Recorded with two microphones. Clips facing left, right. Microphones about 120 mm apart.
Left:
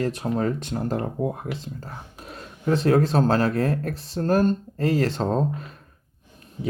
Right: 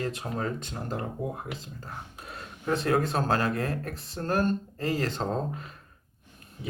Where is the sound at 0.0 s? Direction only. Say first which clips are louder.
Left 7 dB; 45° left (ahead or behind); by 4.2 s 65° left (ahead or behind).